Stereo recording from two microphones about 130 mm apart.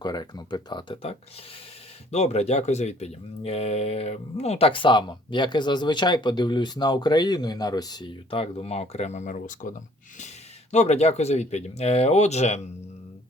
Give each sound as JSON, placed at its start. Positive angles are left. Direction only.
{"t": 0.0, "sound": "speech", "side_deg": 30}
{"t": 2.0, "sound": "speech", "side_deg": 55}
{"t": 10.2, "sound": "speech", "side_deg": 60}